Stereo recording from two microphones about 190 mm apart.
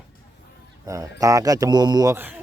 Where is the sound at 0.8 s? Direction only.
15° right (ahead or behind).